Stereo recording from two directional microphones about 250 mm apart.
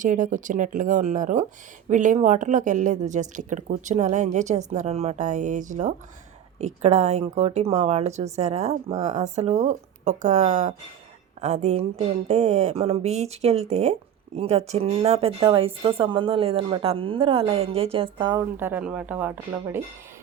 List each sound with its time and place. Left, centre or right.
0.0 s speech: right; by 19.8 s centre